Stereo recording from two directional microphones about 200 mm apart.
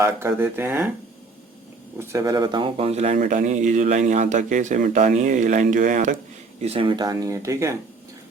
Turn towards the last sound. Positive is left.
turn(degrees=-15)  # may be behind; listen again after turning